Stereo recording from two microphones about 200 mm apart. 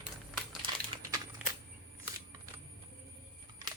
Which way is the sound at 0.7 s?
20° right (ahead or behind).